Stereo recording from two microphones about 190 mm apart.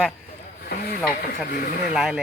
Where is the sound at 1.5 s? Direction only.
50° left (ahead or behind).